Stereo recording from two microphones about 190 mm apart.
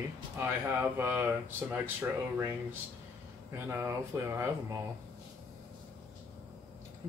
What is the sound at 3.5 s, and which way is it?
Speech, 15° right (ahead or behind).